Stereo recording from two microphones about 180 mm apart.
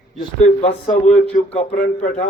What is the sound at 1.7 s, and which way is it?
Speech, 45° left (ahead or behind).